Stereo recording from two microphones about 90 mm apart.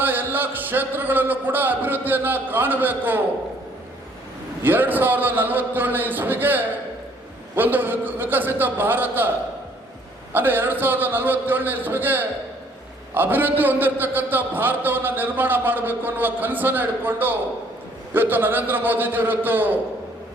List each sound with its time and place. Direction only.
0.0 s a man's voice: 20° right (ahead or behind)
4.6 s a man's voice: 20° right (ahead or behind)
10.3 s a man's voice: 20° right (ahead or behind)